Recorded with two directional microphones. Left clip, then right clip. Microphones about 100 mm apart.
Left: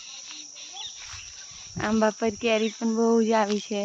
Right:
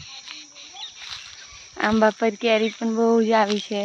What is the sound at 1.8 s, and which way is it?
Speech, 30° right (ahead or behind).